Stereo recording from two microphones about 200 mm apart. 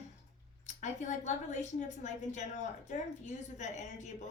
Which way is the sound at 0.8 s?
35° left (ahead or behind).